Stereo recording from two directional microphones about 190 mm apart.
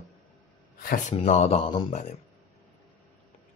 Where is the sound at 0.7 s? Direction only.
50° left (ahead or behind).